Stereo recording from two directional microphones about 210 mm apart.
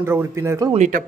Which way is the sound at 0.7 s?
35° right (ahead or behind).